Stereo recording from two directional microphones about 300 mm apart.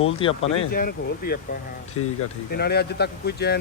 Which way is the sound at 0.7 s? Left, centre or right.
Left.